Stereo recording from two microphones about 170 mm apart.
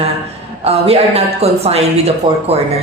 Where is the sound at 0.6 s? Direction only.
35° right (ahead or behind).